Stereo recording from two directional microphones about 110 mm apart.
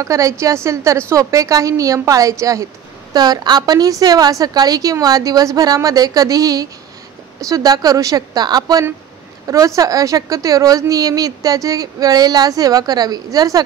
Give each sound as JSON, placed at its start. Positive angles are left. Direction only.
{"t": 0.0, "sound": "a woman's voice", "side_deg": -30}